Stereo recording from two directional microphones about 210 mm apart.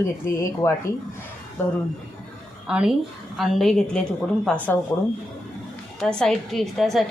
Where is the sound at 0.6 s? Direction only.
10° left (ahead or behind).